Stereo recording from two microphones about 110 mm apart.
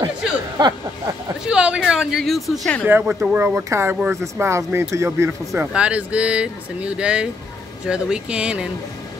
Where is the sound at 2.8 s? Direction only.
15° right (ahead or behind).